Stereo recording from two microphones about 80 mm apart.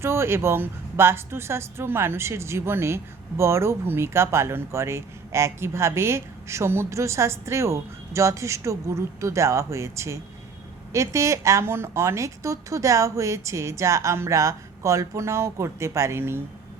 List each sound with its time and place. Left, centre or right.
0.0 s a woman's voice: right